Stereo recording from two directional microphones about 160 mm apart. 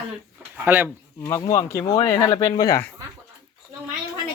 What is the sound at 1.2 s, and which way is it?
Speech, 20° left (ahead or behind).